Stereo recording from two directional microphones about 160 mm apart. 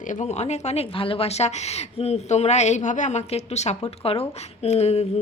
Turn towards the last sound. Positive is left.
turn(degrees=40)  # may be behind; listen again after turning